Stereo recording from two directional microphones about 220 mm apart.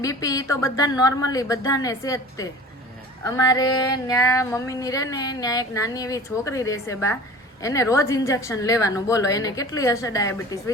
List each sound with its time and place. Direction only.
0.0 s female singing: 15° left (ahead or behind)